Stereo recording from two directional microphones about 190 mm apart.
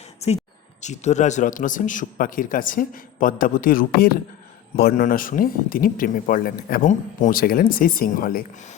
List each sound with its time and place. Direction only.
0.8 s a man's voice: 40° left (ahead or behind)